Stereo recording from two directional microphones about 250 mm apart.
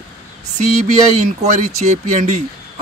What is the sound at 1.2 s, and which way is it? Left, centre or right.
Speech, right.